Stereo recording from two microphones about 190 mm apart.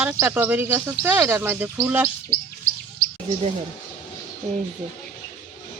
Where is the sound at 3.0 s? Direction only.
50° left (ahead or behind).